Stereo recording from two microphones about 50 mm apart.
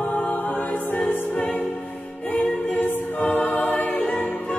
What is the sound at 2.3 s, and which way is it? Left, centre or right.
A capella, left.